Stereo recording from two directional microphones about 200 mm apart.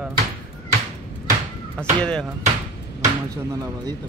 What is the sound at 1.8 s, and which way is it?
Speech, 5° left (ahead or behind).